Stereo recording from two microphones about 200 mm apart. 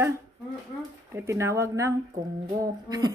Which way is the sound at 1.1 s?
15° right (ahead or behind).